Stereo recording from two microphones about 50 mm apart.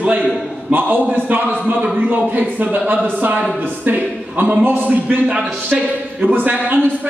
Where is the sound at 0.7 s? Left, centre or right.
Right.